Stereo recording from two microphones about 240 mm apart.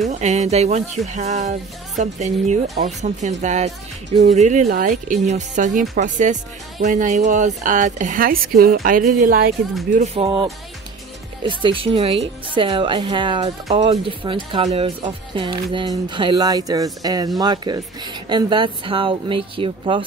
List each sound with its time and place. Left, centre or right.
0.1 s speech: right
9.9 s speech: right